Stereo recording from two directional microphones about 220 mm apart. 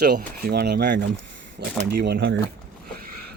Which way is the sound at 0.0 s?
45° right (ahead or behind).